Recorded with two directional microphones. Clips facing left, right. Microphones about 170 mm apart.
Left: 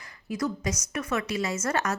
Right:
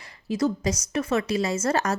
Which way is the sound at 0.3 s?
25° right (ahead or behind).